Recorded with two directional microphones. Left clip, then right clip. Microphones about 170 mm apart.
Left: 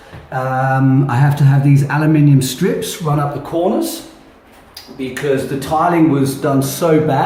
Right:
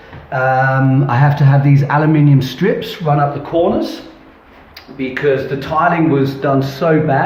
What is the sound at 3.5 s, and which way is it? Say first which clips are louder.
Speech: right 2 dB; 25° left (ahead or behind).